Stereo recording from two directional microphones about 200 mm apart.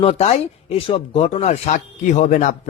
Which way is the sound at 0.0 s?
30° left (ahead or behind).